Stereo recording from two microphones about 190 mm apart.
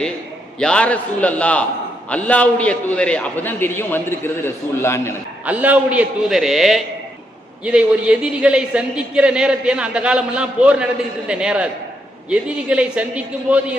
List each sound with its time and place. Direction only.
0.6 s a man's voice: 5° left (ahead or behind)
5.5 s a man's voice: 5° right (ahead or behind)